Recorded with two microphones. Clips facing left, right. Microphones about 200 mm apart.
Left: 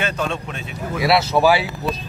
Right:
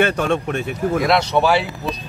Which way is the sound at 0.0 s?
55° right (ahead or behind).